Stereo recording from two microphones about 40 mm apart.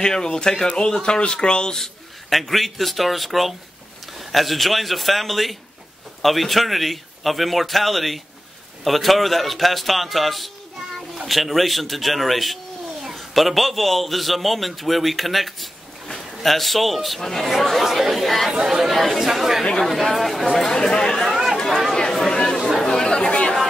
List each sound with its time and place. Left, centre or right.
0.0 s speech: centre
1.8 s a man's voice: centre
18.5 s speech: centre
18.9 s a man's voice: centre
19.2 s speech: centre
19.8 s a man's voice: centre
20.5 s speech: centre
21.3 s chatter: centre
21.9 s chatter: centre
22.6 s chatter: centre
22.8 s chatter: centre